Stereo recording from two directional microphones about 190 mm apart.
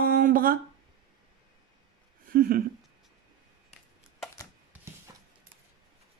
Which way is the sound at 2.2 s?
50° right (ahead or behind).